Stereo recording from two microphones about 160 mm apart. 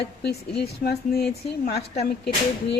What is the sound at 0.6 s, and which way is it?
Speech, 85° left.